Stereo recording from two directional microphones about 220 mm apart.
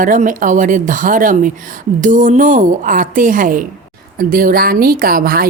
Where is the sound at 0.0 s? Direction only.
35° right (ahead or behind).